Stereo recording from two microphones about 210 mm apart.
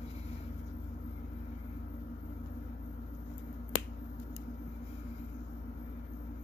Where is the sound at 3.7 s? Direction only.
20° left (ahead or behind).